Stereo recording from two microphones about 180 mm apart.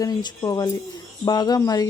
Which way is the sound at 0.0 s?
20° left (ahead or behind).